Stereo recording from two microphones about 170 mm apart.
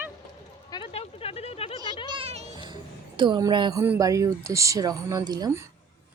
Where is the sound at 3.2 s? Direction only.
25° right (ahead or behind).